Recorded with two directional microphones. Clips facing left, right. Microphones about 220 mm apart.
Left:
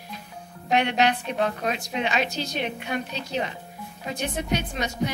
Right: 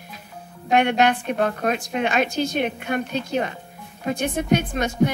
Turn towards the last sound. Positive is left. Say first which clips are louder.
# right 7 dB
turn(degrees=-50)  # may be behind; listen again after turning